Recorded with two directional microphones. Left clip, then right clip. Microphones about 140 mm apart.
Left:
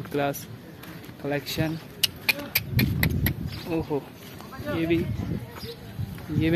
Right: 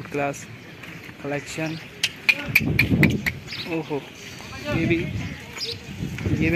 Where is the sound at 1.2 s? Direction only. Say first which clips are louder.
Even; 20° left (ahead or behind); by 3.6 s 35° left (ahead or behind).